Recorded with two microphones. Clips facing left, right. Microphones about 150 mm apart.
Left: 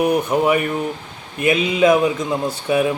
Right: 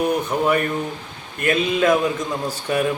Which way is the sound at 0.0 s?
10° left (ahead or behind).